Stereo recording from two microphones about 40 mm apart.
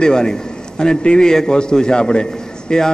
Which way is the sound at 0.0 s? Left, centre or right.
Centre.